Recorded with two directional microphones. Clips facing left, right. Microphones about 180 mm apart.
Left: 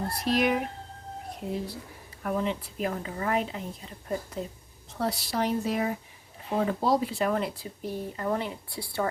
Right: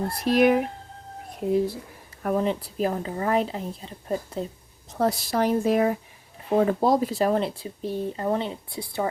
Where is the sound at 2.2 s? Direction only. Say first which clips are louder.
Right 5 dB; 40° right (ahead or behind).